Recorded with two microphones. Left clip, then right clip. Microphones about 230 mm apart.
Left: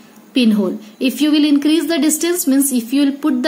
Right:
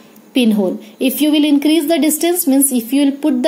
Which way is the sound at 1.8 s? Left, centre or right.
Centre.